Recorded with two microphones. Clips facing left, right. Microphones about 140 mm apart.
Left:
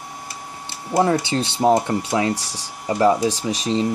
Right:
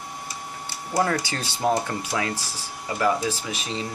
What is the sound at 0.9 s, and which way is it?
Speech, 25° left (ahead or behind).